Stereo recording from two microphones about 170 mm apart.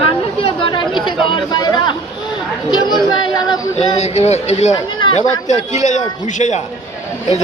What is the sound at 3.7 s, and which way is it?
A woman's voice, 40° left (ahead or behind).